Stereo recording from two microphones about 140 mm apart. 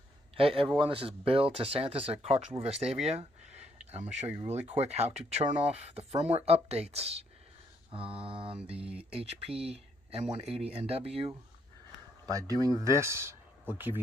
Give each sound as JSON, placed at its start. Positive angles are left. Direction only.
{"t": 0.4, "sound": "mantra", "side_deg": -40}
{"t": 0.7, "sound": "speech", "side_deg": -40}
{"t": 7.9, "sound": "mantra", "side_deg": -40}
{"t": 8.6, "sound": "speech", "side_deg": -45}
{"t": 12.3, "sound": "speech", "side_deg": -25}